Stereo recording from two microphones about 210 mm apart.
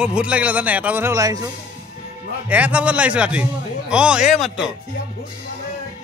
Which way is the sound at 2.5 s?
5° right (ahead or behind).